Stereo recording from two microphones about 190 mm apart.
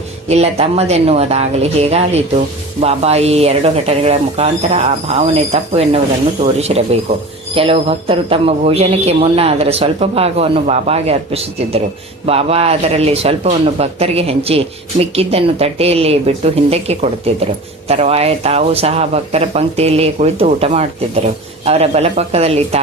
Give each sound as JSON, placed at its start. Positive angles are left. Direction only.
{"t": 0.3, "sound": "speech", "side_deg": -35}